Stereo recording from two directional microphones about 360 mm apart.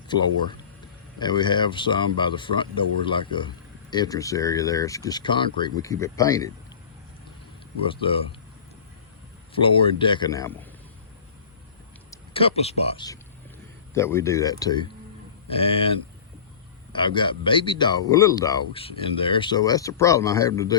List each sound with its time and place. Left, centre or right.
0.1 s speech: centre
7.9 s speech: centre
9.6 s speech: centre
12.1 s speech: centre